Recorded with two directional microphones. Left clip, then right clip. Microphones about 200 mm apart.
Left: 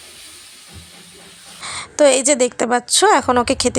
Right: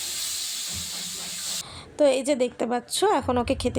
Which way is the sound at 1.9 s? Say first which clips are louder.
Left 8 dB; 15° left (ahead or behind).